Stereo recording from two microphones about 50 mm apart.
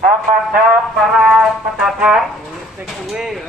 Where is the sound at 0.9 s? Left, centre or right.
Centre.